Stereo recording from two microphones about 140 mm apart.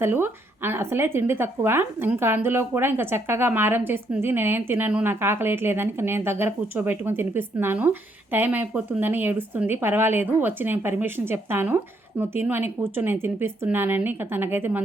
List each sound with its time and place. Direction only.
0.0 s speech: 15° right (ahead or behind)